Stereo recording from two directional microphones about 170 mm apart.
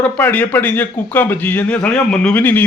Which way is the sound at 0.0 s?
10° left (ahead or behind).